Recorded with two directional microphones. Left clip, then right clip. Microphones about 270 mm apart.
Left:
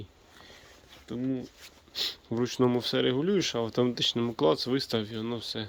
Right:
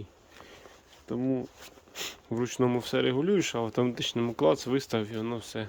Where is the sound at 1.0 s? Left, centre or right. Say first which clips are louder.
Right 3 dB; centre.